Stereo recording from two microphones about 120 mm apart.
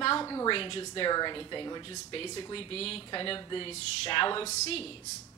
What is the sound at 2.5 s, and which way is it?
Speech, 55° left (ahead or behind).